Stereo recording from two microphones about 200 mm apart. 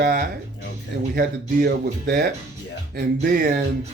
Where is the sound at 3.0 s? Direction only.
40° right (ahead or behind).